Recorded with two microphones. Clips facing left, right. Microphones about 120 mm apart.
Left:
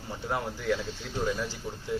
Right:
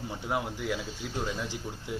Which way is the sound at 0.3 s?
10° right (ahead or behind).